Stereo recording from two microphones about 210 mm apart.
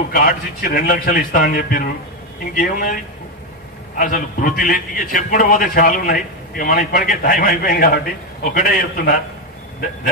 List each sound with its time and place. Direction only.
0.1 s a man's voice: 45° left (ahead or behind)
4.0 s a man's voice: 40° left (ahead or behind)